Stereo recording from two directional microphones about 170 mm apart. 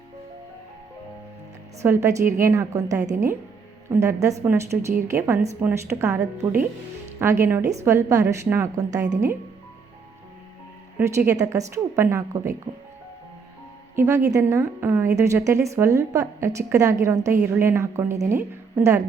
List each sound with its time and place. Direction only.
1.8 s a woman's voice: 15° right (ahead or behind)
10.9 s a woman's voice: 15° right (ahead or behind)
13.9 s a woman's voice: 15° right (ahead or behind)